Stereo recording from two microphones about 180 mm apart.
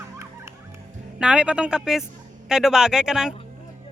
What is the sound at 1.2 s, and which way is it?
A man's voice, 5° right (ahead or behind).